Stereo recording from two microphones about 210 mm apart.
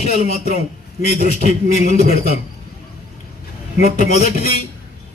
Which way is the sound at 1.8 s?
30° left (ahead or behind).